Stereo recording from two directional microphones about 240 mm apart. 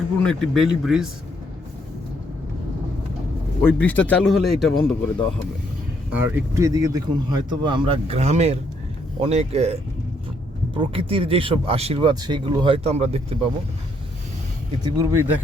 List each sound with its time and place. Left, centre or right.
0.3 s a man's voice: centre
3.6 s a man's voice: centre
6.3 s speech: centre
14.9 s speech: centre